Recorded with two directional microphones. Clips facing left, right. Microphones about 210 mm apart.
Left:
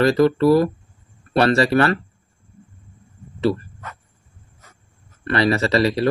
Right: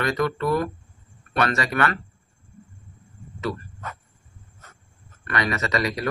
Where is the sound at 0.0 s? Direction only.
35° left (ahead or behind).